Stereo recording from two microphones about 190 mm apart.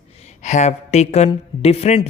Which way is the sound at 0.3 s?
40° left (ahead or behind).